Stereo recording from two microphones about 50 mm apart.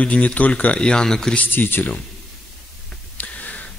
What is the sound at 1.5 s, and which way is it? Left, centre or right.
Speech, left.